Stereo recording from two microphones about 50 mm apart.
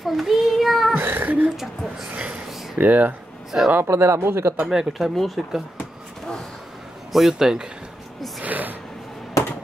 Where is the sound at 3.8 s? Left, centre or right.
Right.